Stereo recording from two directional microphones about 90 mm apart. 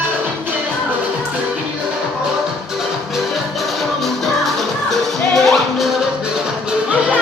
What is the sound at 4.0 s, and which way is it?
Music, centre (ahead or behind).